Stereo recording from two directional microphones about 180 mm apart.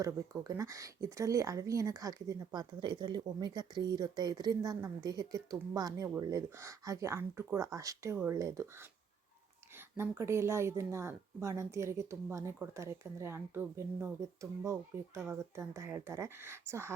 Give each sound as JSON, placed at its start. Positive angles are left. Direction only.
{"t": 0.0, "sound": "a woman's voice", "side_deg": -15}